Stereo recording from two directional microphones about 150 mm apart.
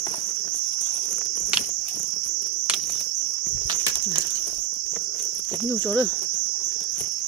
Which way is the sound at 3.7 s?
25° right (ahead or behind).